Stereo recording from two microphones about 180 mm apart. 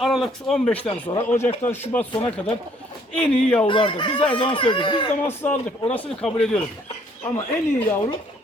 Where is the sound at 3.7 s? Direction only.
25° left (ahead or behind).